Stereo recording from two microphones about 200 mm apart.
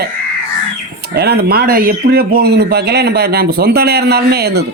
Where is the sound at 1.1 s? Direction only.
55° right (ahead or behind).